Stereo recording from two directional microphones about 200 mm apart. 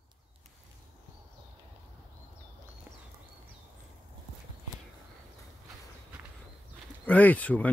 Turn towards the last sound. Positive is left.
turn(degrees=10)  # may be behind; listen again after turning